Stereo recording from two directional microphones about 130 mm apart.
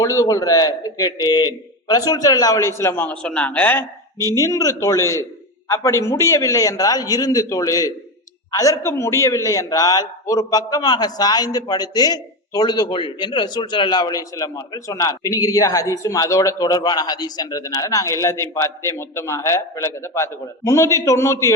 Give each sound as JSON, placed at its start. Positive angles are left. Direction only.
{"t": 0.0, "sound": "a man's voice", "side_deg": 25}
{"t": 4.4, "sound": "a man's voice", "side_deg": 25}